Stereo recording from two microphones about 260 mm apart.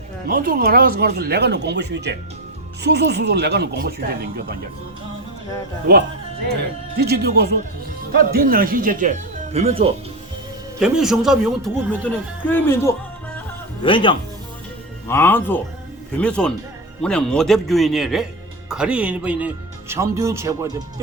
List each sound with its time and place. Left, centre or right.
0.3 s speech: right
6.9 s speech: right
10.8 s a man's voice: centre
15.0 s a man's voice: centre